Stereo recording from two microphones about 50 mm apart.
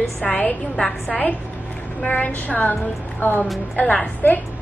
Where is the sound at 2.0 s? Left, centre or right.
Left.